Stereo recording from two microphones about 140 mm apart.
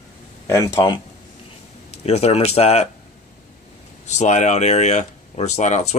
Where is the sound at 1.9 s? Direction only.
50° left (ahead or behind).